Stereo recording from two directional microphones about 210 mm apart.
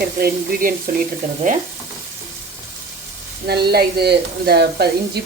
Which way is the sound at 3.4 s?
50° right (ahead or behind).